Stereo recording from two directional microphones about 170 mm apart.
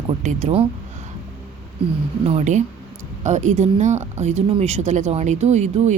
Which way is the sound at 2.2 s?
35° right (ahead or behind).